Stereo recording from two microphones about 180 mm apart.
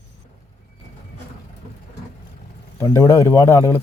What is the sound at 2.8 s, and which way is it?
Speech, 15° left (ahead or behind).